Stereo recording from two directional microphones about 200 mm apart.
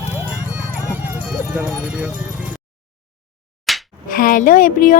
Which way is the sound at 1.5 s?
5° right (ahead or behind).